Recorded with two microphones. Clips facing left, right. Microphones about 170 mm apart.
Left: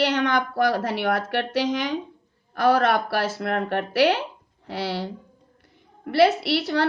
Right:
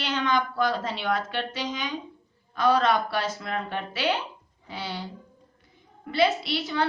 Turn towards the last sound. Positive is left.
turn(degrees=65)  # may be behind; listen again after turning